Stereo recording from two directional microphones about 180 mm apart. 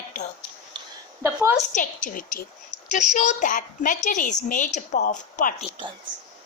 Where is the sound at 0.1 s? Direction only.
45° left (ahead or behind).